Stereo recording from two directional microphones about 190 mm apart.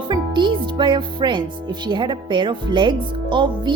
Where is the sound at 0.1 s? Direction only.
25° right (ahead or behind).